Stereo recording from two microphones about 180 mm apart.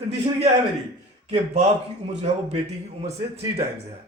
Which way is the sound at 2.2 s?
35° right (ahead or behind).